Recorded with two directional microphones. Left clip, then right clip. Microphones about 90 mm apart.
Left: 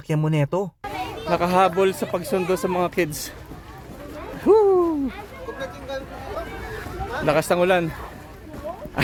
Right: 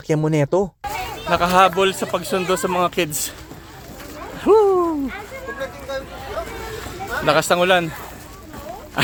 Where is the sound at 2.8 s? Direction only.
15° left (ahead or behind).